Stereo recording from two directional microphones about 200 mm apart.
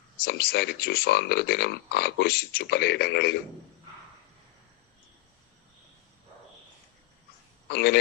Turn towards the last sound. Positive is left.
turn(degrees=55)  # may be behind; listen again after turning